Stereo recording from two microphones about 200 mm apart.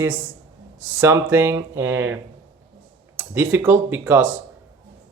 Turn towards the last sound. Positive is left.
turn(degrees=-10)  # may be behind; listen again after turning